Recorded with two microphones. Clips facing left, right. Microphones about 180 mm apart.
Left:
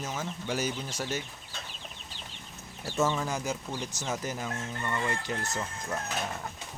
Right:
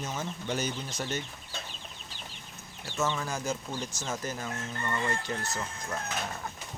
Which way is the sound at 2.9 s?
10° left (ahead or behind).